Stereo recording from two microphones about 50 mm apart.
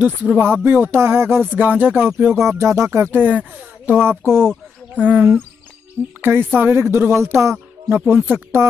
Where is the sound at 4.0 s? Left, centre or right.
Right.